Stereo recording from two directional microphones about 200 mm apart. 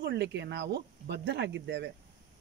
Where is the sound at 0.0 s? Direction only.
60° right (ahead or behind).